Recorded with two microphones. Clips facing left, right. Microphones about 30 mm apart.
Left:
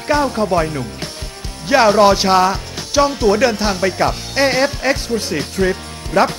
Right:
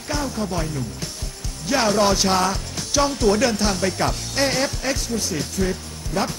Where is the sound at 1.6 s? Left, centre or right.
Left.